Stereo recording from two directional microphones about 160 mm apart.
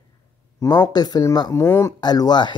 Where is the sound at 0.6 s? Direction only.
25° left (ahead or behind).